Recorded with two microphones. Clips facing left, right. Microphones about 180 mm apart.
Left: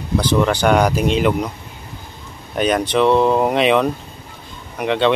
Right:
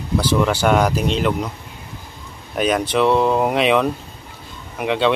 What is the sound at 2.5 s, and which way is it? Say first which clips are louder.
Speech: left 1 dB; 5° right (ahead or behind).